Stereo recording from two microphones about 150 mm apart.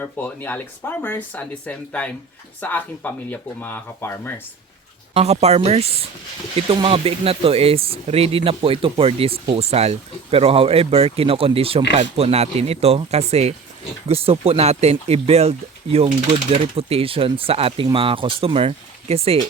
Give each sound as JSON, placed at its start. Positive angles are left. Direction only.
{"t": 0.0, "sound": "speech", "side_deg": 10}
{"t": 5.1, "sound": "speech", "side_deg": -45}